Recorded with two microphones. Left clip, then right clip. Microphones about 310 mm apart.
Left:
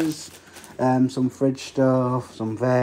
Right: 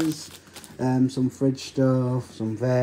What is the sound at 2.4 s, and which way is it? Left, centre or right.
Speech, left.